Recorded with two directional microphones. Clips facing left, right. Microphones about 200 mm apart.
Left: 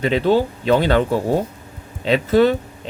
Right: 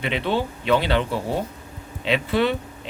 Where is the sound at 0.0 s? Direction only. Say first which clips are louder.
Left 7 dB; 40° left (ahead or behind).